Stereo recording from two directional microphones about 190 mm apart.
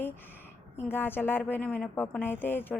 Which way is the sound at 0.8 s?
10° left (ahead or behind).